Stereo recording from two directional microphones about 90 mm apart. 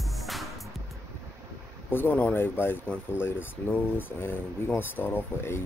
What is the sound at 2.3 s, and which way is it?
Speech, 25° left (ahead or behind).